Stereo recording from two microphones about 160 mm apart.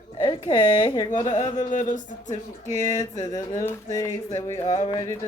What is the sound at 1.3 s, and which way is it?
Speech, 50° left (ahead or behind).